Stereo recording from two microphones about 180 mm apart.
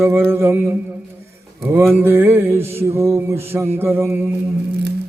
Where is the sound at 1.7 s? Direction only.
10° right (ahead or behind).